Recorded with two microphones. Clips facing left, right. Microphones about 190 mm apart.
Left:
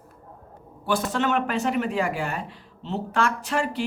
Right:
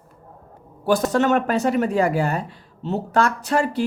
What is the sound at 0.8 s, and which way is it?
Speech, 40° right (ahead or behind).